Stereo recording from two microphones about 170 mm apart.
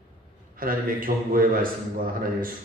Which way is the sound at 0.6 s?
60° right (ahead or behind).